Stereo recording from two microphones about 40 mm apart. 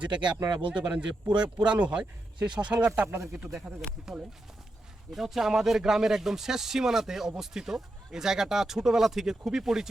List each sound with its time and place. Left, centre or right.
0.0 s speech: right
2.8 s speech: right
5.1 s speech: centre